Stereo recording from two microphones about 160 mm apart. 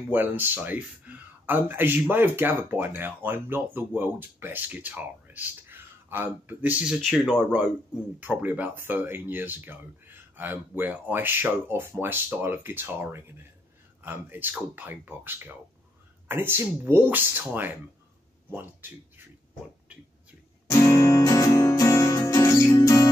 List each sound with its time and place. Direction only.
0.1 s speech: 10° right (ahead or behind)
20.8 s music: 15° left (ahead or behind)